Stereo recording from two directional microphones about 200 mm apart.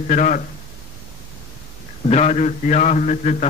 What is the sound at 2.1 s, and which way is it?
A man's voice, 35° left (ahead or behind).